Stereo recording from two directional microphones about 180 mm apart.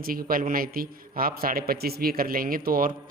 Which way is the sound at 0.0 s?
55° right (ahead or behind).